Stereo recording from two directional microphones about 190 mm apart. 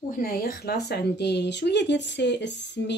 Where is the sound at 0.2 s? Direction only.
50° left (ahead or behind).